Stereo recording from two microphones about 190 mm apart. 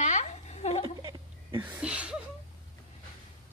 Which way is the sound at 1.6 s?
5° right (ahead or behind).